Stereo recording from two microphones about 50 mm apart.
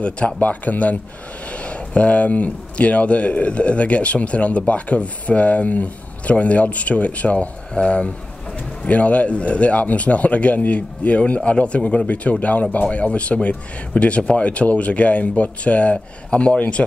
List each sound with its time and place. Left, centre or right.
0.4 s speech: left